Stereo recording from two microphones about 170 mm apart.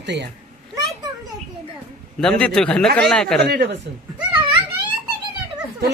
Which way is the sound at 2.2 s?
5° left (ahead or behind).